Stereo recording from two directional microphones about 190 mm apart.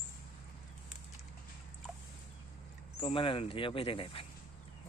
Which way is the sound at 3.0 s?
30° left (ahead or behind).